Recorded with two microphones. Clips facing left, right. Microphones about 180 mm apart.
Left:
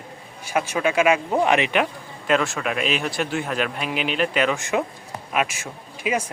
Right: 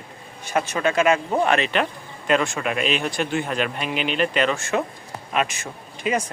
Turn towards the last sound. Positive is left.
turn(degrees=5)  # may be behind; listen again after turning